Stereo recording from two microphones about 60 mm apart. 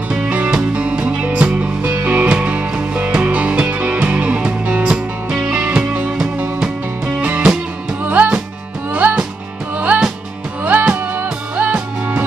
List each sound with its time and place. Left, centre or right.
0.2 s music: right
7.2 s music: right
9.8 s music: right